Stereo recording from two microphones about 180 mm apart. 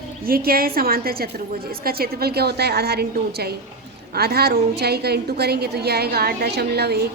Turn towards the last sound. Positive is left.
turn(degrees=-65)  # may be behind; listen again after turning